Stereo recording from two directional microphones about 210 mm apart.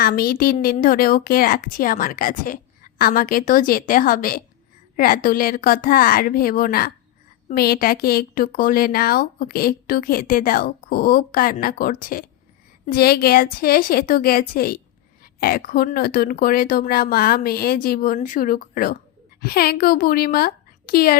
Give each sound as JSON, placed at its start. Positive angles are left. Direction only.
{"t": 0.0, "sound": "a woman's voice", "side_deg": 45}